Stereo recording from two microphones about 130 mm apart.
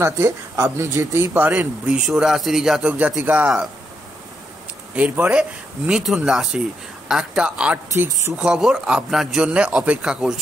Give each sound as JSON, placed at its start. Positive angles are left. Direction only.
{"t": 0.0, "sound": "speech", "side_deg": -20}
{"t": 4.9, "sound": "speech", "side_deg": -10}
{"t": 7.9, "sound": "speech", "side_deg": -20}
{"t": 8.4, "sound": "speech", "side_deg": 0}